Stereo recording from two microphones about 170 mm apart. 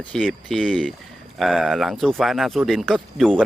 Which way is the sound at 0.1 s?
5° left (ahead or behind).